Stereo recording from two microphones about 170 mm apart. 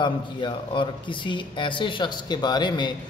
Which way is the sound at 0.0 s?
30° left (ahead or behind).